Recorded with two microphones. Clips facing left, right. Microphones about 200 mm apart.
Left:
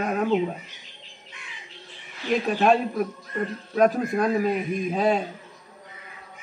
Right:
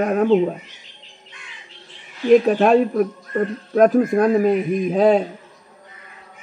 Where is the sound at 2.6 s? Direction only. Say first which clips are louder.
Right 6 dB; 50° right (ahead or behind).